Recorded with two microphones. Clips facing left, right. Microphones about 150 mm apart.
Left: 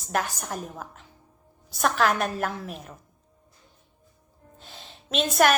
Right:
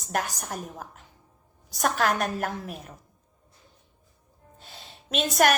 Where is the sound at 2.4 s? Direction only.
45° right (ahead or behind).